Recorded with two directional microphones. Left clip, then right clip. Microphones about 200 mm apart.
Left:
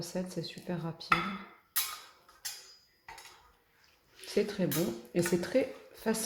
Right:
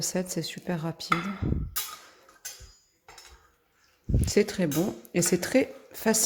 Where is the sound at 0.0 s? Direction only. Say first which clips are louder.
Right 7 dB; 40° right (ahead or behind).